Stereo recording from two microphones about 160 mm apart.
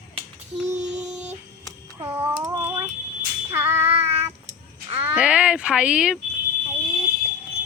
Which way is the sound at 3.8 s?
40° right (ahead or behind).